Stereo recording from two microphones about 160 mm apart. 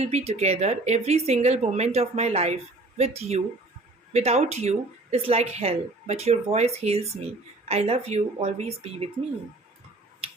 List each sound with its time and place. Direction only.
0.0 s a woman's voice: 40° right (ahead or behind)